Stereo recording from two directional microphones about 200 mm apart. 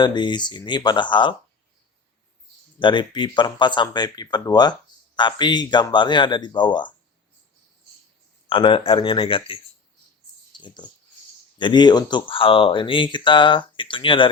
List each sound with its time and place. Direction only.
0.0 s speech: 20° left (ahead or behind)
2.7 s speech: 25° left (ahead or behind)
8.4 s speech: 25° left (ahead or behind)
10.6 s speech: 20° left (ahead or behind)